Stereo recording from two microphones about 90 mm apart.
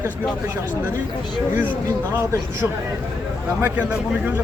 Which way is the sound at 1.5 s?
20° right (ahead or behind).